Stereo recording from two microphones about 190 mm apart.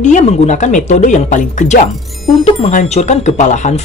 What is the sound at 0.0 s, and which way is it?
Speech, 40° left (ahead or behind).